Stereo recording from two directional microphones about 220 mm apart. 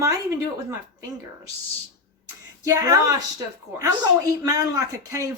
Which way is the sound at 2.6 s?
15° right (ahead or behind).